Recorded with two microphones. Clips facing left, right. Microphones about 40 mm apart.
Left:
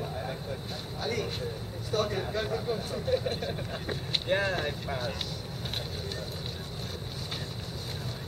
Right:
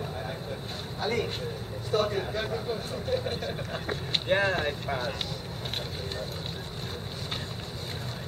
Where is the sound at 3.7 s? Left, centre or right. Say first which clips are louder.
Right 2 dB; centre.